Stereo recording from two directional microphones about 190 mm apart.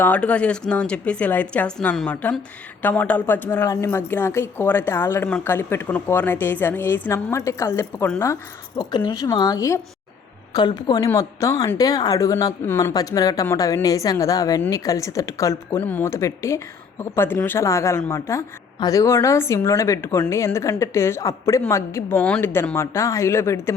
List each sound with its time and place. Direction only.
0.0 s a woman's voice: 5° left (ahead or behind)
8.8 s a woman's voice: 25° left (ahead or behind)